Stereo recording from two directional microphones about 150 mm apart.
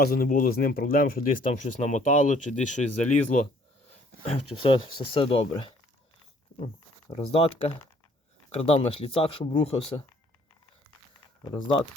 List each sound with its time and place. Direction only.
0.0 s speech: 80° left; by 3.5 s 60° left (ahead or behind)
4.3 s speech: 35° left (ahead or behind)
7.1 s speech: 40° left (ahead or behind)